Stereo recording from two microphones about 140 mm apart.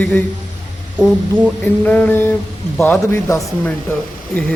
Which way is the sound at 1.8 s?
15° left (ahead or behind).